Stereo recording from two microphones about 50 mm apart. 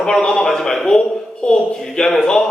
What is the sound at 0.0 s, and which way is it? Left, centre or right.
A man's voice, centre.